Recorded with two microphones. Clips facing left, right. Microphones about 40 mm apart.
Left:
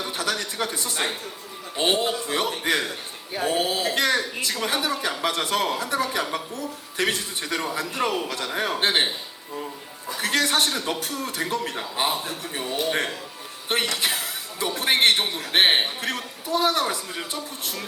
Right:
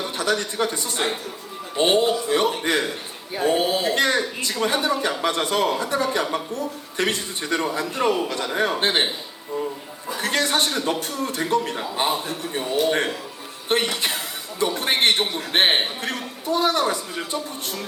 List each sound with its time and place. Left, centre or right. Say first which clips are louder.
0.0 s a woman's voice: right 4 dB; centre
10.2 s a woman's voice: right 1 dB; centre